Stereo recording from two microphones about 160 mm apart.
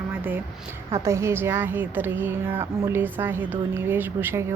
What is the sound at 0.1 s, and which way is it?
A woman's voice, 10° right (ahead or behind).